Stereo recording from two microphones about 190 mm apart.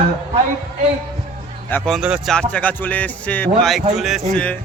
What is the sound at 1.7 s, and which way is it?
Speech, centre (ahead or behind).